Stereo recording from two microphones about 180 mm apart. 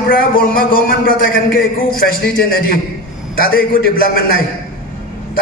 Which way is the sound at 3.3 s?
55° left (ahead or behind).